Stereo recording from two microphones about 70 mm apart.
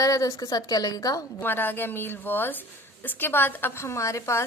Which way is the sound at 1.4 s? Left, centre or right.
Left.